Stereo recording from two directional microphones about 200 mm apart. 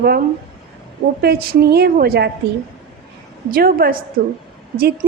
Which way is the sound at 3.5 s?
45° right (ahead or behind).